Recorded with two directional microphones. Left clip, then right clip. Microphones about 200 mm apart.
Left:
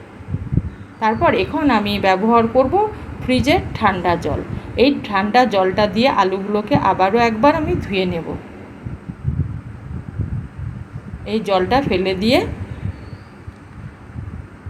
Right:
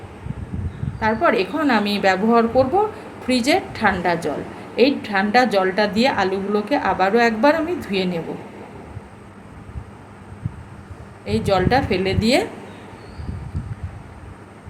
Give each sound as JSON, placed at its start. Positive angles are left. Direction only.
{"t": 0.9, "sound": "a woman's voice", "side_deg": 0}
{"t": 11.3, "sound": "a woman's voice", "side_deg": 0}